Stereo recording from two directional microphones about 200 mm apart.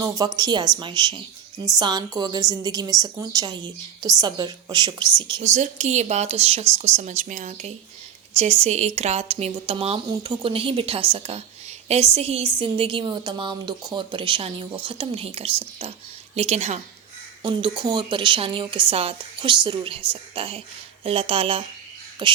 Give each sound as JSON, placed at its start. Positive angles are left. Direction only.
{"t": 0.0, "sound": "a woman's voice", "side_deg": -15}
{"t": 5.4, "sound": "a woman's voice", "side_deg": -35}
{"t": 17.4, "sound": "a woman's voice", "side_deg": -25}